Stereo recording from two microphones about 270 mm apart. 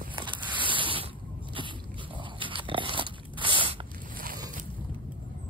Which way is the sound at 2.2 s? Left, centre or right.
Centre.